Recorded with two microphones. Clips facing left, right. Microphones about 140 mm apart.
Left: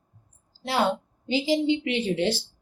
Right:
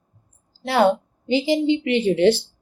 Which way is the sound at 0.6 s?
60° right (ahead or behind).